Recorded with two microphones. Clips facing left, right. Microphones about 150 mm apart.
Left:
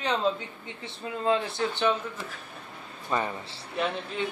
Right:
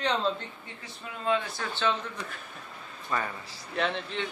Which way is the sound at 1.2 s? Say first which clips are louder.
Left 2 dB; 30° left (ahead or behind).